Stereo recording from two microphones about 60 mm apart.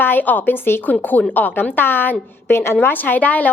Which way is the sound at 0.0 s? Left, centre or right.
Left.